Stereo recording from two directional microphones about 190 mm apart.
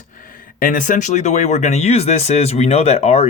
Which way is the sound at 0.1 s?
45° left (ahead or behind).